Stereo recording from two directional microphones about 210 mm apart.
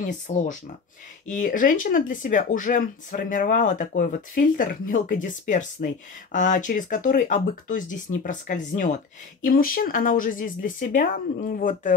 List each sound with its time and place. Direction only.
0.0 s speech: 35° left (ahead or behind)